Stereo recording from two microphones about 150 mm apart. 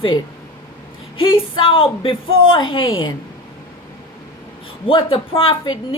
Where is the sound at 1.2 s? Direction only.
35° left (ahead or behind).